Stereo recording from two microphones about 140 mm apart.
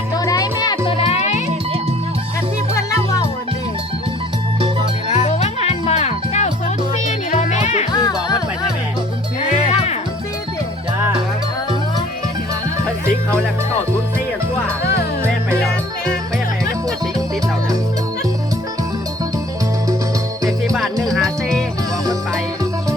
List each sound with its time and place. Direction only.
0.1 s music: 25° left (ahead or behind)
0.9 s music: 45° left (ahead or behind)
5.0 s music: 50° left (ahead or behind)
7.9 s music: 25° left (ahead or behind)
9.4 s music: 50° left (ahead or behind)
21.0 s music: centre (ahead or behind)